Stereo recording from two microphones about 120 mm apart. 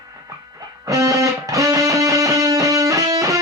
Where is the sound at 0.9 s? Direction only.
30° right (ahead or behind).